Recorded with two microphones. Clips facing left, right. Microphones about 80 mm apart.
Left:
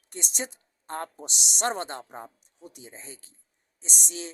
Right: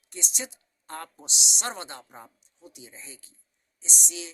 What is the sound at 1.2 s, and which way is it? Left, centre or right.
A woman's voice, left.